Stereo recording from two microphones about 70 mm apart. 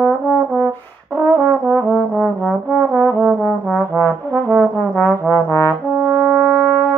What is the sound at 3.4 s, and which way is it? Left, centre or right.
Trombone, left.